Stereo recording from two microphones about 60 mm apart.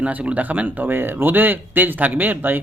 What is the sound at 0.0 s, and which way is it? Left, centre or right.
A man's voice, right.